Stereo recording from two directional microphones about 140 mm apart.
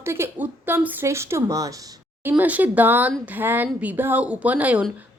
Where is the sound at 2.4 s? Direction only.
10° right (ahead or behind).